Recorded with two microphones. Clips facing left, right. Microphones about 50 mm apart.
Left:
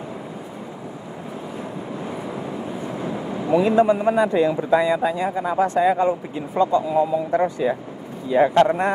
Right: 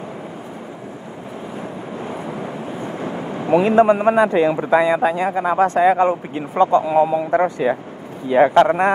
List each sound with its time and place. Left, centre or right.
3.0 s speech: right
8.3 s speech: right